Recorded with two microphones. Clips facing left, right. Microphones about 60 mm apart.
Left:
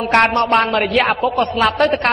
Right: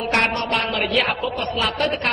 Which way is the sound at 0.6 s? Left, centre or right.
Left.